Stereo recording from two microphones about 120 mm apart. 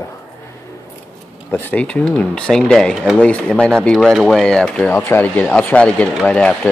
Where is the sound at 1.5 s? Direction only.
15° left (ahead or behind).